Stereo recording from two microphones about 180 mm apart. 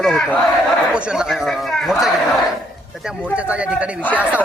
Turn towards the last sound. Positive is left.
turn(degrees=-10)  # may be behind; listen again after turning